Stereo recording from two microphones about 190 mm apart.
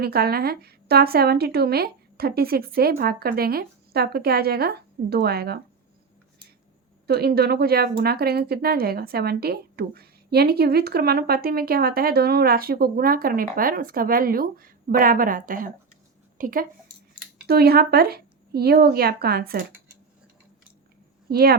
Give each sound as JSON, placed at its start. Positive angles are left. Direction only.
{"t": 0.0, "sound": "a woman's voice", "side_deg": -55}
{"t": 7.1, "sound": "speech", "side_deg": -55}
{"t": 21.2, "sound": "speech", "side_deg": -55}